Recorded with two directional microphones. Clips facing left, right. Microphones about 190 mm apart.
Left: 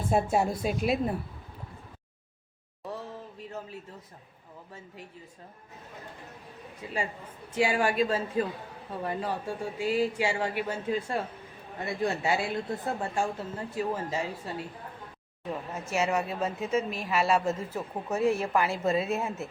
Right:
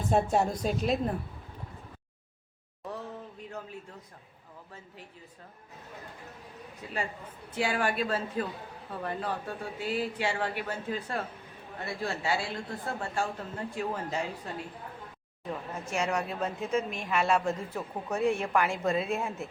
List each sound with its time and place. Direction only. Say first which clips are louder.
0.1 s a woman's voice: even; 10° left (ahead or behind)
2.8 s a sound: left 1 dB; centre (ahead or behind)
6.9 s a woman's voice: left 2 dB; 10° left (ahead or behind)
13.7 s a woman's voice: left 3 dB; 5° left (ahead or behind)
15.7 s a woman's voice: left 3 dB; 5° left (ahead or behind)